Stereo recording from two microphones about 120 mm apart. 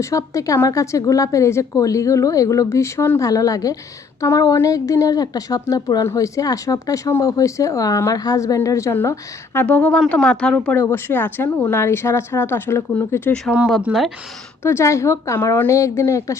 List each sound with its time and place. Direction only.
0.0 s a woman's voice: 25° left (ahead or behind)
9.6 s speech: 10° left (ahead or behind)
13.8 s speech: centre (ahead or behind)
14.6 s a woman's voice: 20° left (ahead or behind)